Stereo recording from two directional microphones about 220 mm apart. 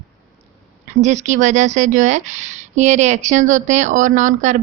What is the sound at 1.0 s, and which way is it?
Speech, 30° right (ahead or behind).